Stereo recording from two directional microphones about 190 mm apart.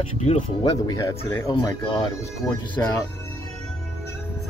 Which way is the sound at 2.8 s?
15° left (ahead or behind).